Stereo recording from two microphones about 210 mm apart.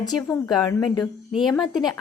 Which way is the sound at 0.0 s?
20° left (ahead or behind).